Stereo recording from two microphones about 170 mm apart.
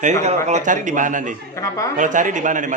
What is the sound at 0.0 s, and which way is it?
Speech, 45° right (ahead or behind).